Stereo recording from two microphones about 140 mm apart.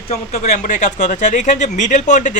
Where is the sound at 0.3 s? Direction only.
55° left (ahead or behind).